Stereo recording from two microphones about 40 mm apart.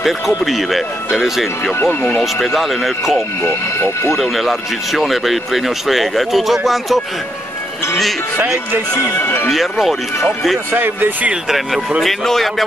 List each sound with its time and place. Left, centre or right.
0.0 s speech: centre
1.9 s speech: left
2.4 s speech: centre
3.4 s speech: left
4.2 s speech: centre
9.2 s speech: left
9.5 s speech: centre
10.7 s speech: right
11.4 s speech: centre